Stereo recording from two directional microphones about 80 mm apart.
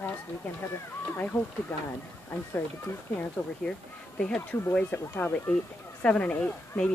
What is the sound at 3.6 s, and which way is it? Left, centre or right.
Speech, centre.